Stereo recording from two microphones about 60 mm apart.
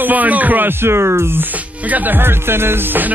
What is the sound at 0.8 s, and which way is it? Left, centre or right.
Speech, right.